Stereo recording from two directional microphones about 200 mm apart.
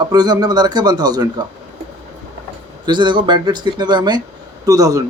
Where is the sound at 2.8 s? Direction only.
20° right (ahead or behind).